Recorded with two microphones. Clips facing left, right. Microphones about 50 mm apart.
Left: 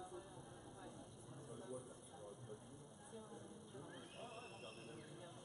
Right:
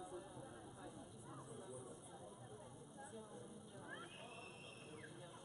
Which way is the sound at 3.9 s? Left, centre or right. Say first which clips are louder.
Right 2 dB; right.